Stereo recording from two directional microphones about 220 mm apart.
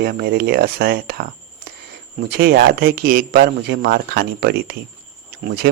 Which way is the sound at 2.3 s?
45° right (ahead or behind).